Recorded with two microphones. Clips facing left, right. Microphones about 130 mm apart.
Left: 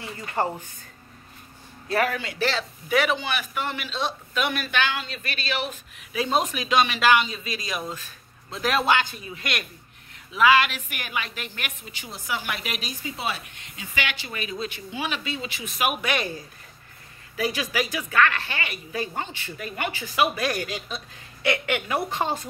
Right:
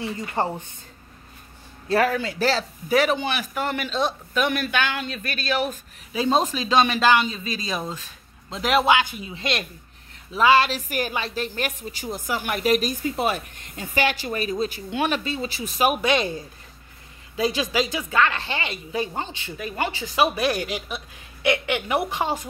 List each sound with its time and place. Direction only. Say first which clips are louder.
0.4 s speech: even; 20° right (ahead or behind)
1.9 s a woman's voice: right 4 dB; 35° right (ahead or behind)
6.1 s a woman's voice: right 3 dB; 30° right (ahead or behind)
19.7 s speech: right 4 dB; 30° right (ahead or behind); by 22.5 s 10° right (ahead or behind)